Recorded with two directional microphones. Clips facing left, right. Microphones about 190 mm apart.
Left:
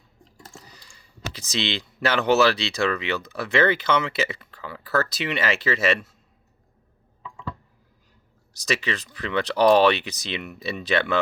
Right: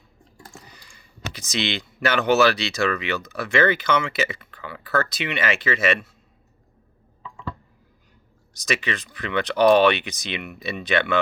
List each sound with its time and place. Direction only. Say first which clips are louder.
0.6 s speech: right 1 dB; 30° left (ahead or behind)
8.6 s speech: even; 30° left (ahead or behind)